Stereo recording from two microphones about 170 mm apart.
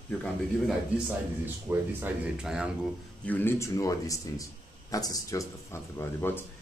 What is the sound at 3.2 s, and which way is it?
Speech, 10° left (ahead or behind).